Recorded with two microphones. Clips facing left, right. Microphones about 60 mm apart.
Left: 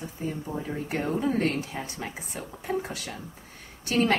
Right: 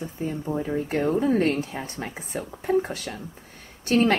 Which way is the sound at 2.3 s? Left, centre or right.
Right.